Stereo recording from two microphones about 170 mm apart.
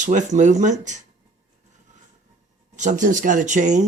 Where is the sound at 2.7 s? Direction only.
45° right (ahead or behind).